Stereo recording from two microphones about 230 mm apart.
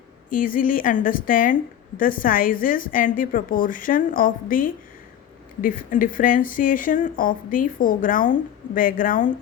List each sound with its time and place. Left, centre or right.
0.3 s speech: left